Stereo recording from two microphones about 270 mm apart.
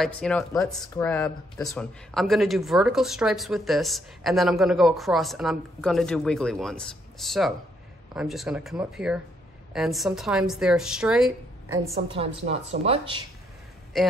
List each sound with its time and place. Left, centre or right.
0.0 s speech: centre
2.1 s speech: centre
12.1 s speech: right
13.9 s speech: centre